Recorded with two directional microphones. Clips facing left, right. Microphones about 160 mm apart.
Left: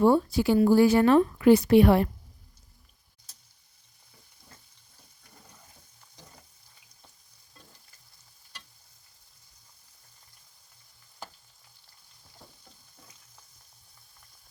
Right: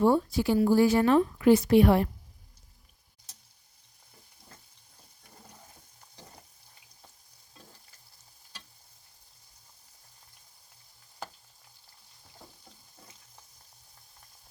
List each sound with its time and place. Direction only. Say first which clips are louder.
0.0 s speech: left 2 dB; 80° left